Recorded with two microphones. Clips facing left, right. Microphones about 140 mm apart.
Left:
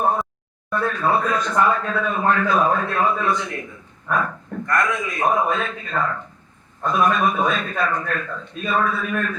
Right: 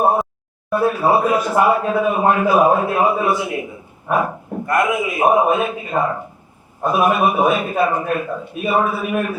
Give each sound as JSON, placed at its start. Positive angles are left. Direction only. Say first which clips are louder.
{"t": 0.8, "sound": "speech", "louder": "right 5 dB", "side_deg": -10}
{"t": 4.3, "sound": "dog", "louder": "right 4 dB", "side_deg": -25}
{"t": 4.7, "sound": "speech", "louder": "right 5 dB", "side_deg": -10}